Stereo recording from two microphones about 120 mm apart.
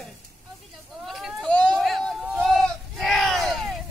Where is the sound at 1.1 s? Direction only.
Centre (ahead or behind).